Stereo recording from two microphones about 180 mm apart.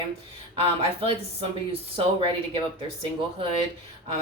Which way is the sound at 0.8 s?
30° right (ahead or behind).